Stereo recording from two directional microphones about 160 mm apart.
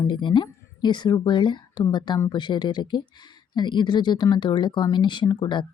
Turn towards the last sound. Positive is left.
turn(degrees=30)  # may be behind; listen again after turning